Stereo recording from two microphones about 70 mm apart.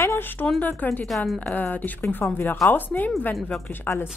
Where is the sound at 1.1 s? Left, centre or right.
Centre.